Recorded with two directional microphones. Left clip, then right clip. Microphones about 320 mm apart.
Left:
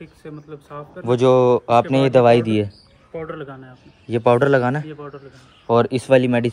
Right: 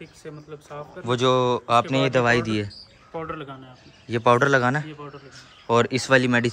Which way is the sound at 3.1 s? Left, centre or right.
Right.